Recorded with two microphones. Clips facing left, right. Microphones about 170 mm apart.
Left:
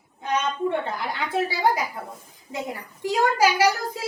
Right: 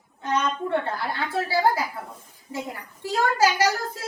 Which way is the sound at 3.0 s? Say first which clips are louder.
Left 1 dB; 15° left (ahead or behind).